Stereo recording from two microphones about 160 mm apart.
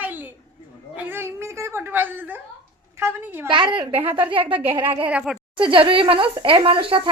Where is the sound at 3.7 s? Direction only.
30° right (ahead or behind).